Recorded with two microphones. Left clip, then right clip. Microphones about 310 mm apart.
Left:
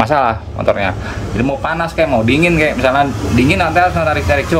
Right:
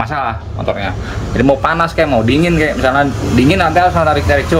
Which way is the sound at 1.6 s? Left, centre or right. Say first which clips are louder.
Right 2 dB; centre.